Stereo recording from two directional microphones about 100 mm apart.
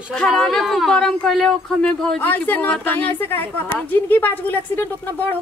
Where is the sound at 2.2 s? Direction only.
20° left (ahead or behind).